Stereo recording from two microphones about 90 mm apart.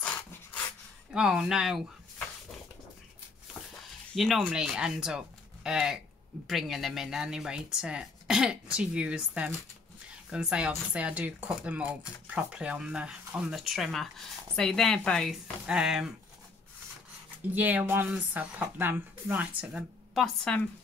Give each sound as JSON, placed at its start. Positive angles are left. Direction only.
{"t": 1.1, "sound": "speech", "side_deg": -10}
{"t": 4.1, "sound": "speech", "side_deg": 0}
{"t": 15.6, "sound": "speech", "side_deg": -5}
{"t": 17.5, "sound": "speech", "side_deg": -20}
{"t": 20.2, "sound": "a woman's voice", "side_deg": 10}